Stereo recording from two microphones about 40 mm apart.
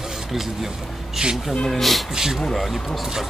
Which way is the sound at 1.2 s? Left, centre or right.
Right.